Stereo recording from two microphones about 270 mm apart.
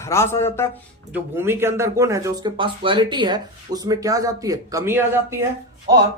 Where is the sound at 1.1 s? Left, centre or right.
Centre.